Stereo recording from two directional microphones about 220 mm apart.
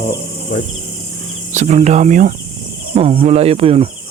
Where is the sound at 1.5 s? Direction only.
35° right (ahead or behind).